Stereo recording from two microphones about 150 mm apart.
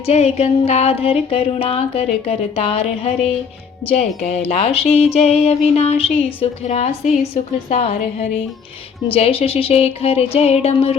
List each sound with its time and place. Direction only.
0.0 s speech: 45° left (ahead or behind)
9.0 s music: 40° left (ahead or behind)